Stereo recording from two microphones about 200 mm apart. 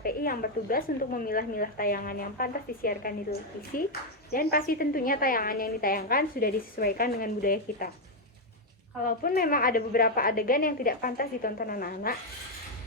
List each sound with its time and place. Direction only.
0.0 s a woman's voice: 45° left (ahead or behind)
9.0 s a woman's voice: 45° left (ahead or behind)